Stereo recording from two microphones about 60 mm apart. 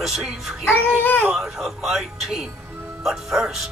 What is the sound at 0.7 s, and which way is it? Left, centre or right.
Speech, left.